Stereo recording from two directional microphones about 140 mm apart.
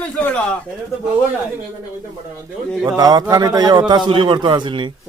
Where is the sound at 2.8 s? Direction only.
25° right (ahead or behind).